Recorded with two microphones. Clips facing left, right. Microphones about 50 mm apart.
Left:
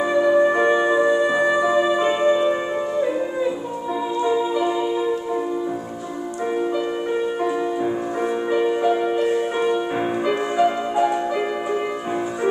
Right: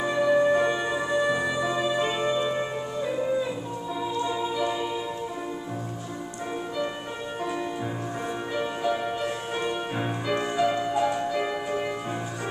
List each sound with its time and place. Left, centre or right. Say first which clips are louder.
0.1 s music: left 4 dB; centre
4.2 s music: left 8 dB; centre
8.5 s music: left 8 dB; centre